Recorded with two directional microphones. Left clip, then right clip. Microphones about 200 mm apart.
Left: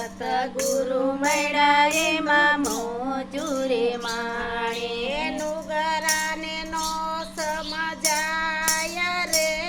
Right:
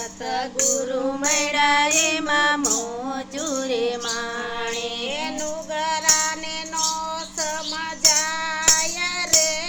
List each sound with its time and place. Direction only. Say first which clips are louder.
0.3 s music: even; centre (ahead or behind)
1.3 s child singing: right 1 dB; 25° right (ahead or behind)
3.5 s music: even; 25° right (ahead or behind)
5.7 s female singing: right 3 dB; centre (ahead or behind)
8.0 s child singing: right 4 dB; centre (ahead or behind)